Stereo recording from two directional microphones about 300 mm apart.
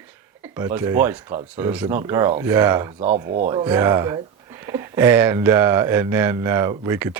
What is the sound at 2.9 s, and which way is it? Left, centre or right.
Speech, right.